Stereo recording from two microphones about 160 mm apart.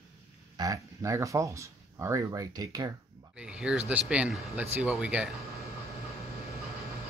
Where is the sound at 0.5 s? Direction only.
20° right (ahead or behind).